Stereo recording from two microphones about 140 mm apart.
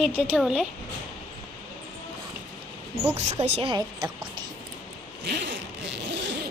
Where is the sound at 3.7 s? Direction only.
35° right (ahead or behind).